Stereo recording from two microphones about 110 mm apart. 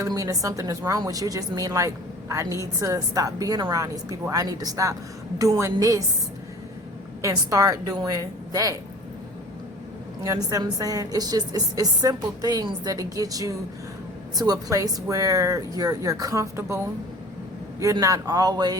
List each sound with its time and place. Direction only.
0.0 s a woman's voice: 30° right (ahead or behind)
7.2 s a woman's voice: 30° right (ahead or behind)
10.2 s a woman's voice: 35° right (ahead or behind)
18.0 s a woman's voice: 35° right (ahead or behind)